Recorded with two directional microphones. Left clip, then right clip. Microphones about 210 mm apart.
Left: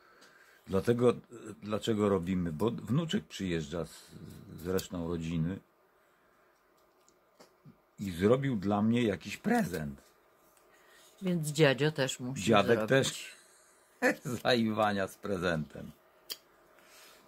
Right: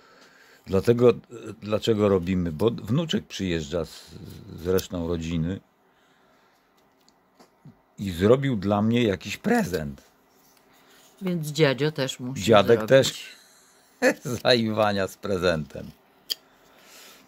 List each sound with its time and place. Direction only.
0.7 s speech: 35° right (ahead or behind)
8.0 s speech: 35° right (ahead or behind)
11.2 s speech: 5° right (ahead or behind)
12.4 s speech: 35° right (ahead or behind)